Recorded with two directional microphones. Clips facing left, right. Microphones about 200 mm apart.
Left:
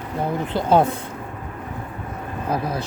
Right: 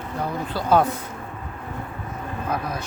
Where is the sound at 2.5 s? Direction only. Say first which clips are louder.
Left 4 dB; 30° left (ahead or behind).